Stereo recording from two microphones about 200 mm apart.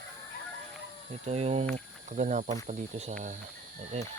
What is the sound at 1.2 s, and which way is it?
Speech, 30° right (ahead or behind).